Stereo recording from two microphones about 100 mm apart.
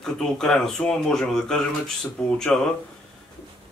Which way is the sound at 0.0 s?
5° left (ahead or behind).